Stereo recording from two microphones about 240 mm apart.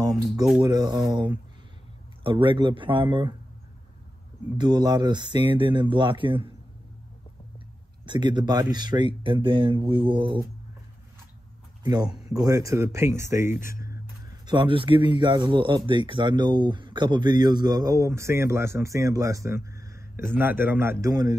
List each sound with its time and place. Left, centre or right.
0.6 s speech: centre
4.6 s speech: centre
8.0 s speech: centre
11.8 s speech: centre